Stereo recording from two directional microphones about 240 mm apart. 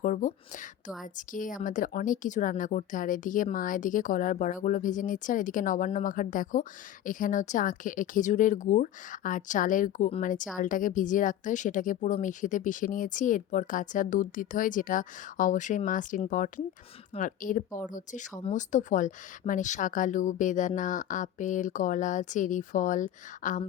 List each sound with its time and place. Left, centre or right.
0.0 s speech: left